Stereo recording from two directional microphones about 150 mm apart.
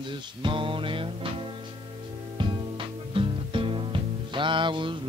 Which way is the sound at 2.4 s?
35° right (ahead or behind).